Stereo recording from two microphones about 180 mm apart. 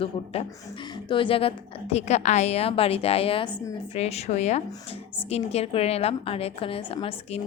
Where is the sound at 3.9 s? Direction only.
35° left (ahead or behind).